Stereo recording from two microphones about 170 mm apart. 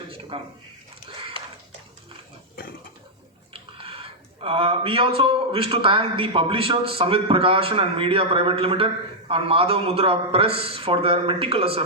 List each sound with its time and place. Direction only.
0.3 s speech: 35° right (ahead or behind)
3.5 s speech: 30° right (ahead or behind)